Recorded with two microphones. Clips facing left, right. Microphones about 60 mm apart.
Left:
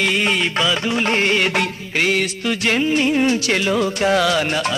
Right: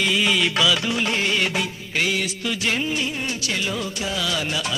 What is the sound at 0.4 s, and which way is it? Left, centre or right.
Music, left.